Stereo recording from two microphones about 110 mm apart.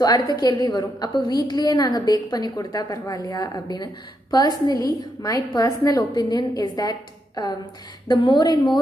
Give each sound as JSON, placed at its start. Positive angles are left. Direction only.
{"t": 0.0, "sound": "a woman's voice", "side_deg": 40}